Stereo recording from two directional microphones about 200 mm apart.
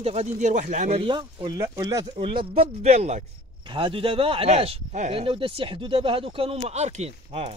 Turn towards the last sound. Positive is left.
turn(degrees=-30)  # may be behind; listen again after turning